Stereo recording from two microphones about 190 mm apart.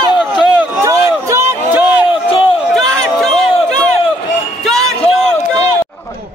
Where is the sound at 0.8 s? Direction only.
15° right (ahead or behind).